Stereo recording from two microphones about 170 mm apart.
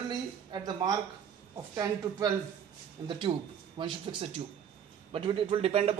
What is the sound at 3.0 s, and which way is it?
A man's voice, 30° right (ahead or behind).